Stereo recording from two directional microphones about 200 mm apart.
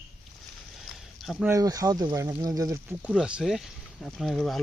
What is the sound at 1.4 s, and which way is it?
Speech, 15° right (ahead or behind).